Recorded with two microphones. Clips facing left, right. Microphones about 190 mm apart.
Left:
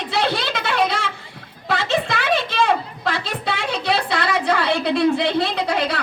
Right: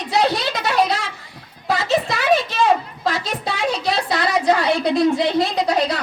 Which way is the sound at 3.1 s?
40° right (ahead or behind).